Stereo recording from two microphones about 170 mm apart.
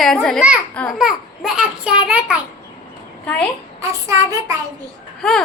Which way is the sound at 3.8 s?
20° right (ahead or behind).